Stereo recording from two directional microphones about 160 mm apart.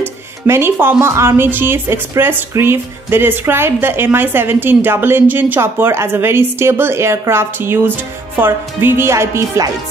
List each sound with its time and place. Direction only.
0.0 s speech: 15° right (ahead or behind)